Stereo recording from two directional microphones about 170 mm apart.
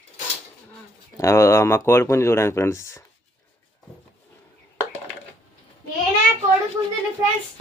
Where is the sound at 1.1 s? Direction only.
15° left (ahead or behind).